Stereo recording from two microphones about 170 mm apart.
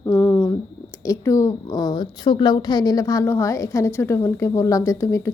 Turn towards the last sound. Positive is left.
turn(degrees=15)  # may be behind; listen again after turning